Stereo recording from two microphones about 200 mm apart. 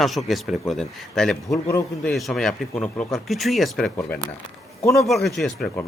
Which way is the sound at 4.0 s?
10° left (ahead or behind).